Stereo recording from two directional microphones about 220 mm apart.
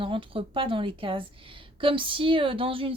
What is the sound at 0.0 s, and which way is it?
A woman's voice, 25° right (ahead or behind).